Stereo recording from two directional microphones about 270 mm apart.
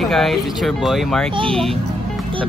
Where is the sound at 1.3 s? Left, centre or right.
Centre.